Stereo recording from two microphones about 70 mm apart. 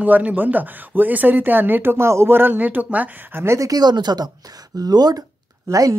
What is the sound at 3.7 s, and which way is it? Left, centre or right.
Speech, right.